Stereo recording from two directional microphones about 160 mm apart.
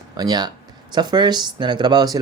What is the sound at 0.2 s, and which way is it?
Speech, 25° right (ahead or behind).